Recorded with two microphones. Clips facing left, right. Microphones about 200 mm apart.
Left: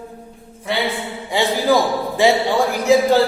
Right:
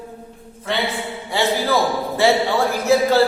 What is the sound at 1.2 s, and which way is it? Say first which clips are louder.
A man's voice: left 3 dB; 15° left (ahead or behind).